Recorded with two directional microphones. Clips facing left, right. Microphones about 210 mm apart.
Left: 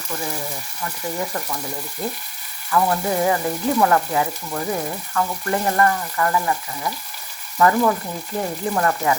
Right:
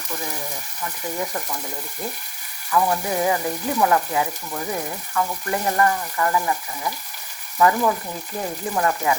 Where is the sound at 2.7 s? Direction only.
15° right (ahead or behind).